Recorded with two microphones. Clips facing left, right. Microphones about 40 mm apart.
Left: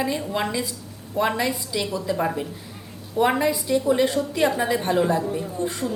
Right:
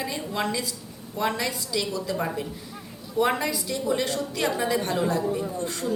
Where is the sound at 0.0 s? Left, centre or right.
Centre.